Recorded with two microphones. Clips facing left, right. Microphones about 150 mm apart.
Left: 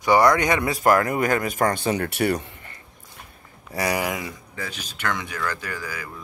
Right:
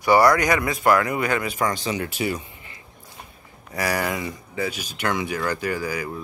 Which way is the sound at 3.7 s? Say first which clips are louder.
Even; 15° left (ahead or behind).